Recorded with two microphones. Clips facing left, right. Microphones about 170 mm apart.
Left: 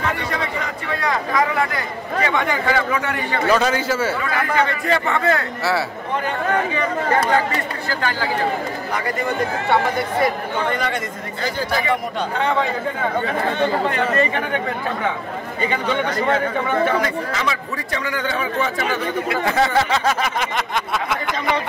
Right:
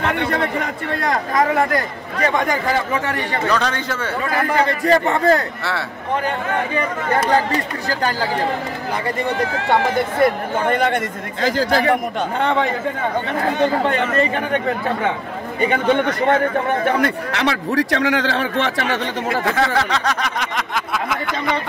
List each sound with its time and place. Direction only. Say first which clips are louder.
0.0 s a sound: right 4 dB; 60° right (ahead or behind)
1.1 s a man's voice: right 3 dB; 45° right (ahead or behind)
3.4 s a man's voice: left 4 dB; 5° left (ahead or behind)
4.3 s a man's voice: right 2 dB; 35° right (ahead or behind)
5.6 s speech: left 4 dB; 5° left (ahead or behind)
7.2 s a man's voice: right 2 dB; 35° right (ahead or behind)
10.2 s speech: right 6 dB; 50° right (ahead or behind)
11.4 s speech: right 6 dB; 90° right
15.6 s speech: right 5 dB; 55° right (ahead or behind); by 19.2 s 80° right
19.4 s speech: left 2 dB; centre (ahead or behind)